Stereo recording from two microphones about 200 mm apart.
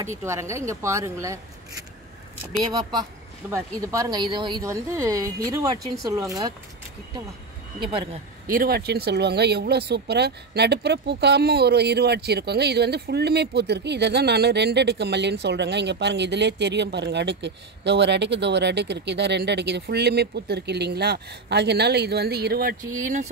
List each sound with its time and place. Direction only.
0.2 s a woman's voice: 15° right (ahead or behind)
2.6 s a woman's voice: 20° right (ahead or behind)
7.8 s a woman's voice: 25° right (ahead or behind)
8.5 s speech: 50° right (ahead or behind)
23.0 s speech: 40° right (ahead or behind)